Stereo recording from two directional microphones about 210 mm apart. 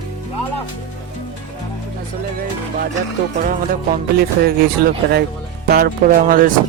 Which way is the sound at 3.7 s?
45° right (ahead or behind).